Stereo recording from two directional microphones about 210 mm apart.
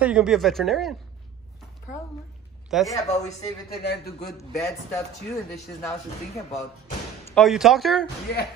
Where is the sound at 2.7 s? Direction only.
Centre (ahead or behind).